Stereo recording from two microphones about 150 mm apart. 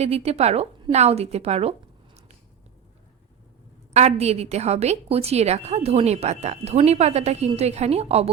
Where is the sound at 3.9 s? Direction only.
50° right (ahead or behind).